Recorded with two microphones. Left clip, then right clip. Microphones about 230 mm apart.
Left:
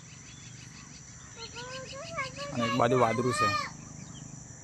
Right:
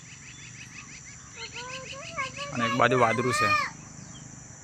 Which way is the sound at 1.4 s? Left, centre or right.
Centre.